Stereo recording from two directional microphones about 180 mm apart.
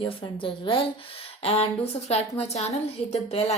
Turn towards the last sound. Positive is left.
turn(degrees=35)  # may be behind; listen again after turning